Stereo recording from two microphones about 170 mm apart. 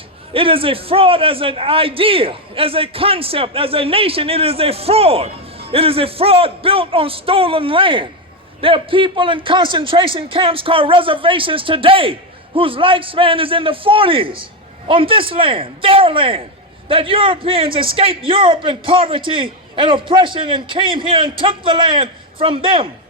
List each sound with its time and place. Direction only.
0.3 s a man's voice: 30° right (ahead or behind)